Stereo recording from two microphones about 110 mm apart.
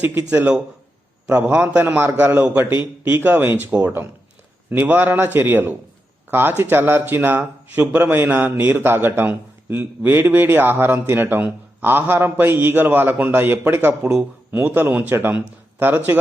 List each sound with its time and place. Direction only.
0.0 s a man's voice: 20° right (ahead or behind)